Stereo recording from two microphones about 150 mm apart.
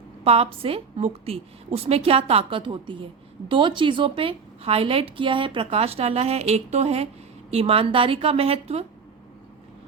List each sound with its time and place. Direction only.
0.3 s a woman's voice: 40° right (ahead or behind)